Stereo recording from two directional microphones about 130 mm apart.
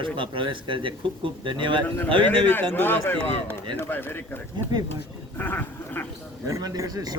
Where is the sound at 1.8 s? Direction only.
15° left (ahead or behind).